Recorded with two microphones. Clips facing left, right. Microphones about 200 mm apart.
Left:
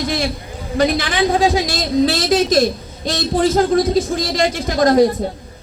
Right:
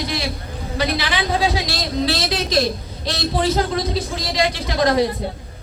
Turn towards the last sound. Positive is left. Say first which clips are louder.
# left 5 dB
turn(degrees=45)  # may be behind; listen again after turning